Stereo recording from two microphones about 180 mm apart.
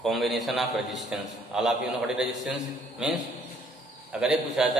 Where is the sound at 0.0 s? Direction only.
Centre (ahead or behind).